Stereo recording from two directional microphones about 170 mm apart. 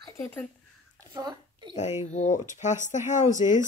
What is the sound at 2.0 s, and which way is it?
Speech, 45° left (ahead or behind).